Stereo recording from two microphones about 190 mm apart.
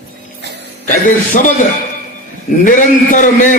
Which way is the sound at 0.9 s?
45° left (ahead or behind).